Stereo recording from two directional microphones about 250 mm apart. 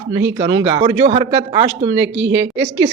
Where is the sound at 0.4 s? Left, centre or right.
Centre.